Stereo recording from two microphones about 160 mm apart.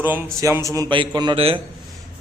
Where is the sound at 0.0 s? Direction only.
15° right (ahead or behind); by 1.6 s 35° right (ahead or behind).